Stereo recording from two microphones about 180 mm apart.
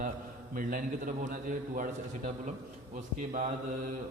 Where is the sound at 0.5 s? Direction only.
50° right (ahead or behind).